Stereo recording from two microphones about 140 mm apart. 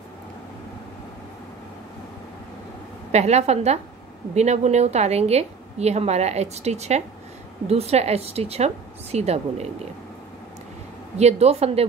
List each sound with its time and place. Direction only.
3.1 s a woman's voice: 50° right (ahead or behind)
11.1 s a woman's voice: 50° right (ahead or behind)